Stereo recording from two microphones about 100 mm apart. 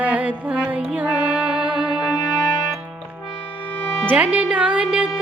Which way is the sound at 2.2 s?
45° left (ahead or behind).